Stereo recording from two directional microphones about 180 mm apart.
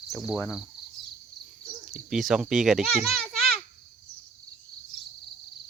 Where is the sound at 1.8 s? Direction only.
Centre (ahead or behind).